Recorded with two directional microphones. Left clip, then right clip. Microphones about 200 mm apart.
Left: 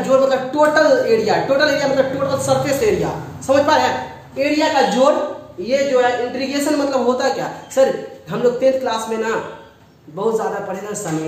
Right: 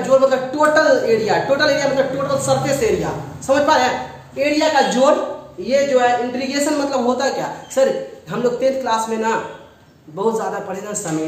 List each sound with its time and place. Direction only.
0.0 s a man's voice: 15° left (ahead or behind)
0.6 s a man's voice: 5° left (ahead or behind)